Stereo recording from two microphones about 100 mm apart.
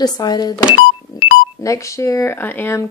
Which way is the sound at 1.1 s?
40° left (ahead or behind).